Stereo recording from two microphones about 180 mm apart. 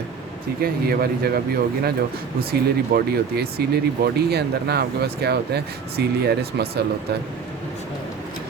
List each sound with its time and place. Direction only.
0.6 s speech: 60° right (ahead or behind)
2.4 s speech: 60° right (ahead or behind)